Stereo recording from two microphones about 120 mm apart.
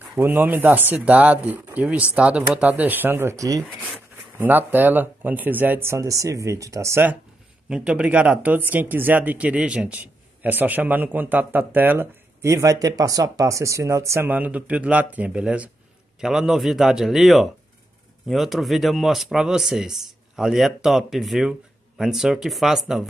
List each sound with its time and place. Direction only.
0.2 s a man's voice: 15° right (ahead or behind)
4.4 s a man's voice: 15° right (ahead or behind)
7.7 s a man's voice: 10° right (ahead or behind)